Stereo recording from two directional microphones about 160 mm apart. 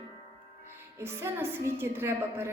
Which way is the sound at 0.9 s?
15° right (ahead or behind).